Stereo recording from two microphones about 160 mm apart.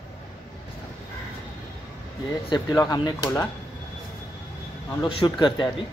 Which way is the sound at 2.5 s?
20° left (ahead or behind).